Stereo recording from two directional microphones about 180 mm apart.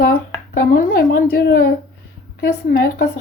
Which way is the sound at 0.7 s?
50° left (ahead or behind).